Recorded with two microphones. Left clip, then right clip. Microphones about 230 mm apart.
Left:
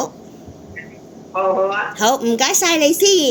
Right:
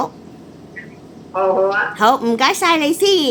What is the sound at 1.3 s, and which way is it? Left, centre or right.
A woman's voice, centre.